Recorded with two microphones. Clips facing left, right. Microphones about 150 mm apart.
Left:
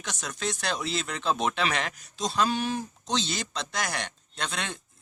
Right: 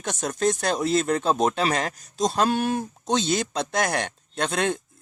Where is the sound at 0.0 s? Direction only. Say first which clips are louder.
Right 9 dB; 50° right (ahead or behind).